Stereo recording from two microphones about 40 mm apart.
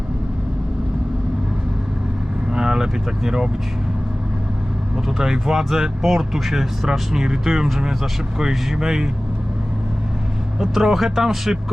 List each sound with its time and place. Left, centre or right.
2.5 s speech: centre
5.1 s speech: centre
10.6 s speech: centre